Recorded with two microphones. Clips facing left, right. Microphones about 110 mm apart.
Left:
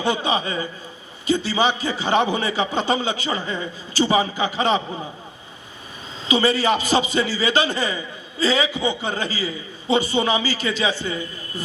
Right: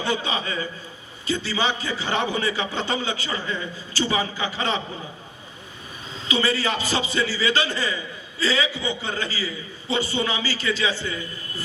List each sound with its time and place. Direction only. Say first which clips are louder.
0.0 s a man's voice: left 4 dB; 20° left (ahead or behind)
6.2 s a man's voice: left 5 dB; 20° left (ahead or behind)